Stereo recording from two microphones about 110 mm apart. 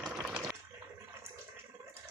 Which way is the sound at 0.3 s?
10° right (ahead or behind).